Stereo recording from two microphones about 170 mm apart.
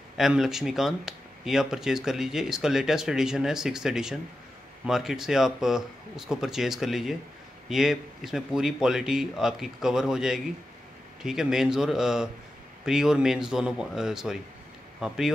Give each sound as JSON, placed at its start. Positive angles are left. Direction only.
{"t": 0.2, "sound": "speech", "side_deg": -5}